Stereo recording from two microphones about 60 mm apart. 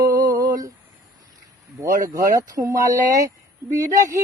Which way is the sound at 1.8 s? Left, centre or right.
Right.